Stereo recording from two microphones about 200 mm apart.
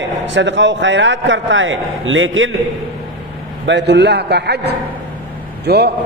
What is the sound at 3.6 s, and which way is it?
A man's voice, 60° right (ahead or behind).